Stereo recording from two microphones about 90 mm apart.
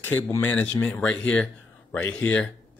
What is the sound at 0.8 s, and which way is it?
A man's voice, 10° left (ahead or behind).